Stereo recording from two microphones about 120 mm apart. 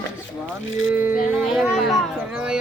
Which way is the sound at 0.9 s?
15° right (ahead or behind).